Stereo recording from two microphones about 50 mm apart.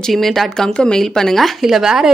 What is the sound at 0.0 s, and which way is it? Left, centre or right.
Speech, centre.